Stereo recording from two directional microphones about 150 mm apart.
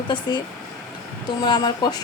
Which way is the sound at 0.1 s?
30° left (ahead or behind).